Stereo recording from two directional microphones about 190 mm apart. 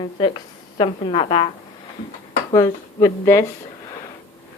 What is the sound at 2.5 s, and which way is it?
Speech, 15° left (ahead or behind).